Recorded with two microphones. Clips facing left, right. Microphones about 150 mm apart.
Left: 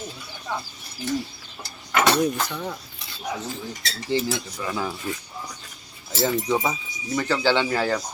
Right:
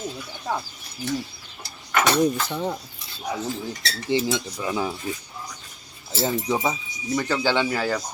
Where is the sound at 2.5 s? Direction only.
25° right (ahead or behind).